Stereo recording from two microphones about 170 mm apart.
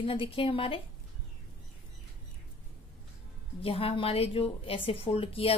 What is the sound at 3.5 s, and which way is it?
A woman's voice, 35° left (ahead or behind).